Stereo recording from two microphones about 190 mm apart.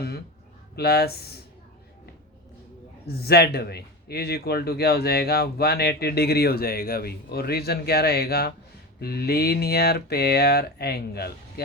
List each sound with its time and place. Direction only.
0.8 s a man's voice: 55° left (ahead or behind)
3.1 s a man's voice: 55° left (ahead or behind)